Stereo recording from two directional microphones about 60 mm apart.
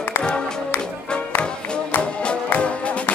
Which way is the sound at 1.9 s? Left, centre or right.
Left.